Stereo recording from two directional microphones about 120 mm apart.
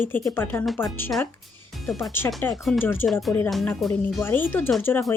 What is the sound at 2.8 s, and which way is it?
Speech, 15° left (ahead or behind).